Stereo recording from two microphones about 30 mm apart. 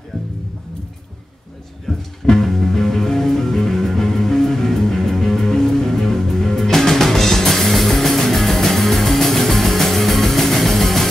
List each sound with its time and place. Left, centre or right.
0.1 s music: centre
1.9 s music: centre